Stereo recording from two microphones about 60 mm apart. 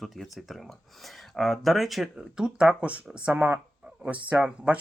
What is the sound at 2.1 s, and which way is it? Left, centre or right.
Speech, centre.